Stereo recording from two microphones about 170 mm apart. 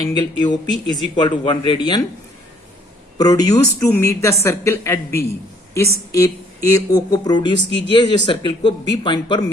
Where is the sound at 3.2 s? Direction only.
20° left (ahead or behind).